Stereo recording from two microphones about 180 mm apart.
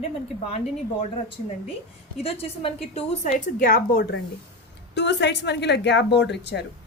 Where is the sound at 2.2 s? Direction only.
35° left (ahead or behind).